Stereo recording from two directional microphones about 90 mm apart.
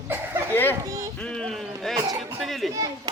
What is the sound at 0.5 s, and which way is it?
Speech, 25° left (ahead or behind).